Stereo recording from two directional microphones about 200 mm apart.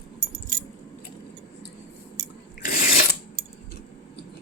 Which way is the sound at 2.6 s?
40° left (ahead or behind).